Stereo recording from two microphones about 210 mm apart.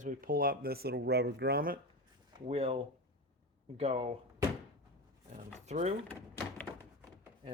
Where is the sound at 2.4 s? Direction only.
30° right (ahead or behind).